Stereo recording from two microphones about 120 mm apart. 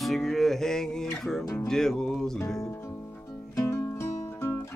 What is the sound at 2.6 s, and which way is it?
Music, 25° left (ahead or behind).